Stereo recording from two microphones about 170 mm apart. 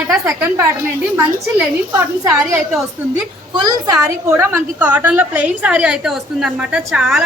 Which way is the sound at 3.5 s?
25° right (ahead or behind).